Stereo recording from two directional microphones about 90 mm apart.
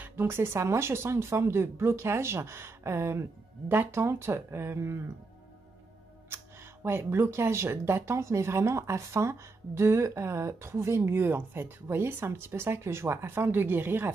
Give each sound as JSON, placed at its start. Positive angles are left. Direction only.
{"t": 0.0, "sound": "speech", "side_deg": -25}
{"t": 6.3, "sound": "speech", "side_deg": -25}